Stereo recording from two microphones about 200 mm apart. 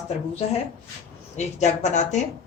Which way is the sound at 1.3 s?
35° left (ahead or behind).